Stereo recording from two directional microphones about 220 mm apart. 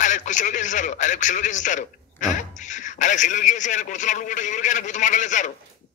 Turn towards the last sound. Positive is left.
turn(degrees=35)  # may be behind; listen again after turning